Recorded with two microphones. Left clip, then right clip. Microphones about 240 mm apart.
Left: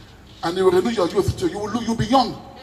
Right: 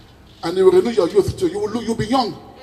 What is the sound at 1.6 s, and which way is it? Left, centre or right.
Speech, right.